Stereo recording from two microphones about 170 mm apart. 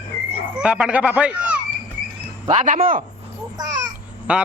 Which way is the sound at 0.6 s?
5° right (ahead or behind).